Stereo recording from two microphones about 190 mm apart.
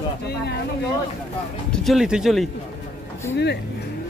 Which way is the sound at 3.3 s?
65° left (ahead or behind).